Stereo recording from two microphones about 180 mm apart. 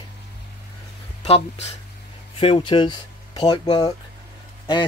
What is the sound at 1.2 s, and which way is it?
Speech, 35° left (ahead or behind).